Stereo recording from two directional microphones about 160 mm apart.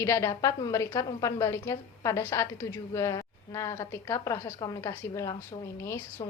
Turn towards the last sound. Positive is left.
turn(degrees=15)  # may be behind; listen again after turning